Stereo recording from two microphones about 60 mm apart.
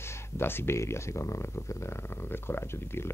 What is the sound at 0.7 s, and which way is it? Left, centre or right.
A man's voice, left.